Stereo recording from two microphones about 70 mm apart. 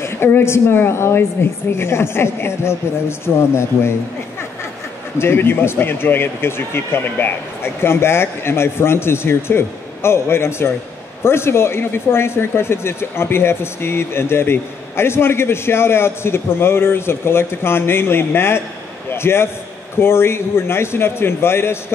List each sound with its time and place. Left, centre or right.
0.0 s speech: left
5.2 s speech: left